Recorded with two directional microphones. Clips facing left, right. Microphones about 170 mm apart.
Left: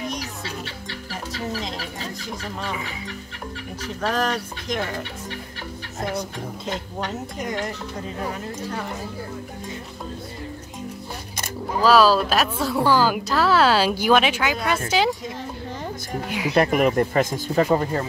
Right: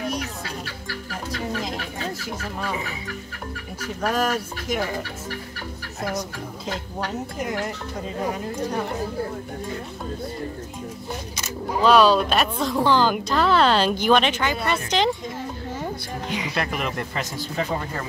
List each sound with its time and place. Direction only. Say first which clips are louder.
0.7 s speech: right 1 dB; 25° left (ahead or behind)
2.6 s speech: right 1 dB; 25° left (ahead or behind)
3.8 s speech: right 1 dB; 10° right (ahead or behind)
7.1 s speech: right 3 dB; 5° right (ahead or behind)
11.8 s speech: even; centre (ahead or behind)
16.3 s speech: left 2 dB; 5° left (ahead or behind)
16.5 s speech: left 12 dB; 45° left (ahead or behind)